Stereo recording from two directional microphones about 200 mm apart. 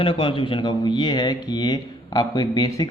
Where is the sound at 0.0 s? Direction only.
25° left (ahead or behind).